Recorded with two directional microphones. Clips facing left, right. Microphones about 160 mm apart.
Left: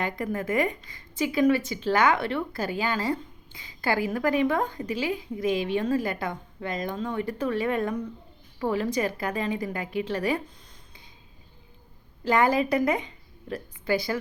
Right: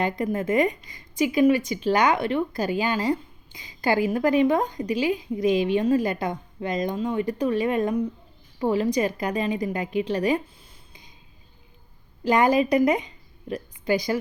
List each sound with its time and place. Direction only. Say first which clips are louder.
0.0 s a woman's voice: right 4 dB; 20° right (ahead or behind)
12.2 s speech: right 3 dB; 15° right (ahead or behind)